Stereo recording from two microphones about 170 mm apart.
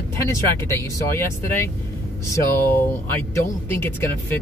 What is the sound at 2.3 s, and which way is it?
Speech, 10° left (ahead or behind).